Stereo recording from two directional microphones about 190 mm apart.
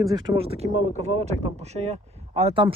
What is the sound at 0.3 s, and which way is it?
Speech, 30° right (ahead or behind).